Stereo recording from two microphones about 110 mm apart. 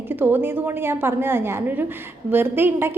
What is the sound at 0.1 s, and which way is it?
A woman's voice, 20° right (ahead or behind).